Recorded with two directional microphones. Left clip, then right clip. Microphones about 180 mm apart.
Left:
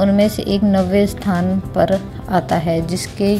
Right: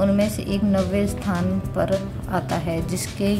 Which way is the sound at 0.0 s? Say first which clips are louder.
Left 6 dB; 20° left (ahead or behind).